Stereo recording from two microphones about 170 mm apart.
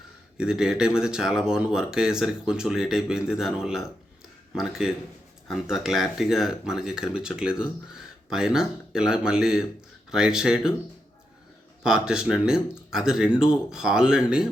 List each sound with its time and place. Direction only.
0.3 s speech: 5° right (ahead or behind)
11.8 s speech: 5° right (ahead or behind)